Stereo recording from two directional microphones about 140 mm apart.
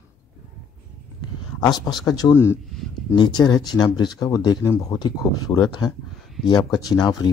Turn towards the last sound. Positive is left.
turn(degrees=25)  # may be behind; listen again after turning